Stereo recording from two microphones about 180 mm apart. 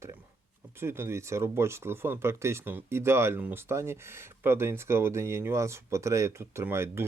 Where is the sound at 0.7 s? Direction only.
15° right (ahead or behind).